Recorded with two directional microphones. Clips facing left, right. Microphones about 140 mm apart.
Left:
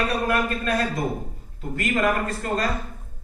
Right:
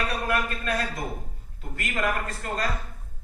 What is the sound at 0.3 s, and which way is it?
A man's voice, 30° left (ahead or behind).